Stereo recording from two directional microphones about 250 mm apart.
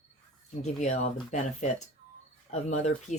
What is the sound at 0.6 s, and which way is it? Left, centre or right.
Speech, left.